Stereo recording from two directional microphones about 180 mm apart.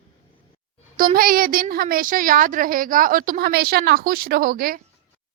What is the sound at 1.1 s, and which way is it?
A woman's voice, 50° right (ahead or behind).